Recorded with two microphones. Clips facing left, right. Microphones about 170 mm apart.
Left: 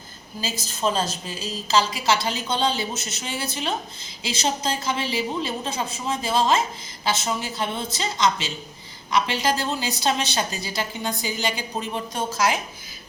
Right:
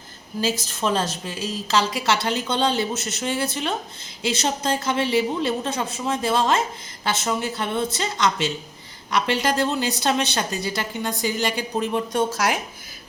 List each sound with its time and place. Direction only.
0.4 s a woman's voice: 75° right (ahead or behind)